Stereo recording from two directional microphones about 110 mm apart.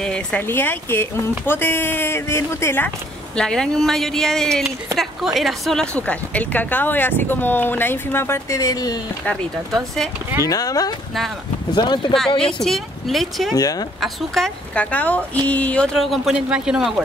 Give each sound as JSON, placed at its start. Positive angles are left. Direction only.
{"t": 0.0, "sound": "speech", "side_deg": 10}
{"t": 0.4, "sound": "speech", "side_deg": 20}
{"t": 3.3, "sound": "speech", "side_deg": 5}
{"t": 5.9, "sound": "speech", "side_deg": 15}
{"t": 10.4, "sound": "speech", "side_deg": 35}
{"t": 11.7, "sound": "speech", "side_deg": 45}
{"t": 12.4, "sound": "speech", "side_deg": 5}
{"t": 13.6, "sound": "speech", "side_deg": 35}
{"t": 14.0, "sound": "a man's voice", "side_deg": 0}